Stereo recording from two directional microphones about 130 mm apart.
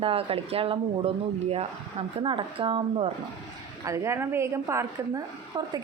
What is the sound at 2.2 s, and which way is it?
Speech, 40° right (ahead or behind).